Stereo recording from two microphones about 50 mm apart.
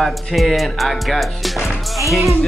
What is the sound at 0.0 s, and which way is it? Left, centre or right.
Music, centre.